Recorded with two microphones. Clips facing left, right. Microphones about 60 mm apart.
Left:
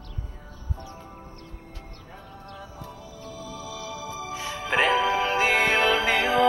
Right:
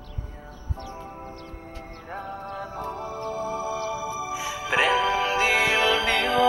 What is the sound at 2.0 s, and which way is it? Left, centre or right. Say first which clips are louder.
Music: right 11 dB; right.